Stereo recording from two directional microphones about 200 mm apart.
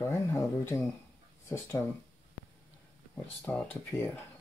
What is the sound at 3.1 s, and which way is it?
Speech, 10° left (ahead or behind).